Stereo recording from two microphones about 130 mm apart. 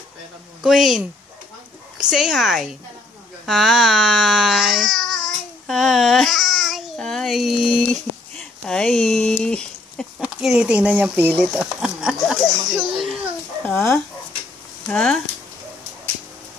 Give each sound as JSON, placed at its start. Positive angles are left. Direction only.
{"t": 0.6, "sound": "a child's voice", "side_deg": -5}
{"t": 8.4, "sound": "a sound", "side_deg": 5}
{"t": 10.4, "sound": "speech", "side_deg": -5}
{"t": 11.3, "sound": "speech", "side_deg": -5}
{"t": 13.7, "sound": "speech", "side_deg": 15}
{"t": 14.9, "sound": "speech", "side_deg": 5}